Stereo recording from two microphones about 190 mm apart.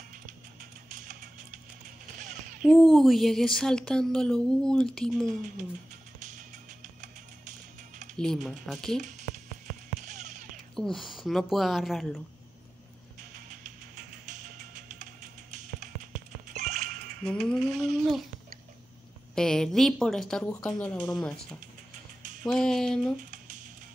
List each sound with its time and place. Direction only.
0.6 s music: 45° right (ahead or behind)
2.6 s speech: centre (ahead or behind)
8.2 s speech: centre (ahead or behind)
8.9 s speech: 40° right (ahead or behind)
10.0 s a sound: 40° right (ahead or behind)
10.8 s speech: centre (ahead or behind)
15.8 s music: 40° right (ahead or behind)
17.2 s speech: 5° left (ahead or behind)
19.3 s speech: 5° left (ahead or behind)
23.3 s music: 40° right (ahead or behind)